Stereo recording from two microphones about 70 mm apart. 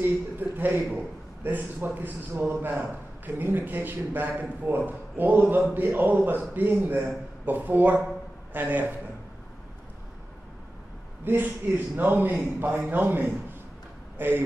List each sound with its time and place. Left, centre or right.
0.0 s a man's voice: right
11.2 s a man's voice: right